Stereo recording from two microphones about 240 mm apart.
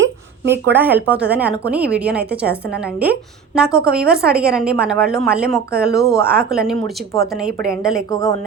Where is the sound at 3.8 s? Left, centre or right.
Centre.